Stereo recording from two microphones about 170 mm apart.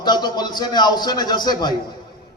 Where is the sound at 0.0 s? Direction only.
25° left (ahead or behind).